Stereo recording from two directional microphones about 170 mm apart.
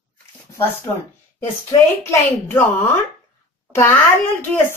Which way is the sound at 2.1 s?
15° left (ahead or behind).